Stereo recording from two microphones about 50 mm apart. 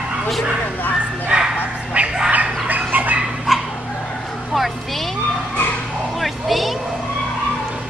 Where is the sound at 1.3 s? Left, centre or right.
Centre.